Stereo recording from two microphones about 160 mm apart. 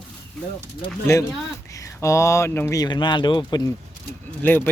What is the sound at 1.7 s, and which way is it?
Speech, 20° left (ahead or behind).